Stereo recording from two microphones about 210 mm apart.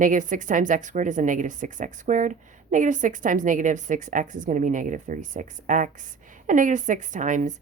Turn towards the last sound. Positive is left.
turn(degrees=-35)  # may be behind; listen again after turning